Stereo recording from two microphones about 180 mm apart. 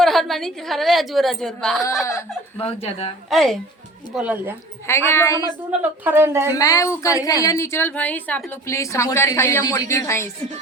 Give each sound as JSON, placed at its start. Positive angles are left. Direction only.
{"t": 0.0, "sound": "a woman's voice", "side_deg": 0}
{"t": 2.6, "sound": "speech", "side_deg": 30}
{"t": 3.2, "sound": "a woman's voice", "side_deg": 0}
{"t": 4.9, "sound": "a woman's voice", "side_deg": 15}
{"t": 6.1, "sound": "speech", "side_deg": -15}
{"t": 6.5, "sound": "a woman's voice", "side_deg": 20}